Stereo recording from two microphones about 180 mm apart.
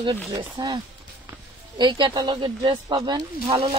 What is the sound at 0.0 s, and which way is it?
Speech, 25° right (ahead or behind).